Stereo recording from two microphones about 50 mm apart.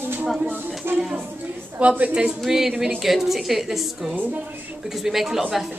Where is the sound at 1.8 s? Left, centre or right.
Right.